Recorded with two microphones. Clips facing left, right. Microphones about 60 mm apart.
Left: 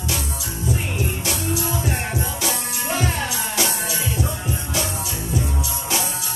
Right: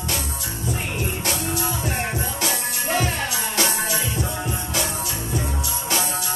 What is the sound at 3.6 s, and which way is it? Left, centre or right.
Music, right.